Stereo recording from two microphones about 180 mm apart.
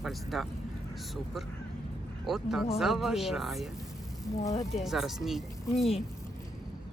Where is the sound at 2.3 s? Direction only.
Centre (ahead or behind).